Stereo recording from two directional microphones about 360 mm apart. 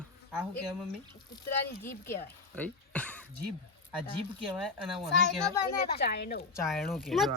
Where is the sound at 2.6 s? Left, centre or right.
Centre.